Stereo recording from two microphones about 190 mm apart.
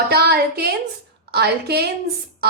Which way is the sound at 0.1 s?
55° right (ahead or behind).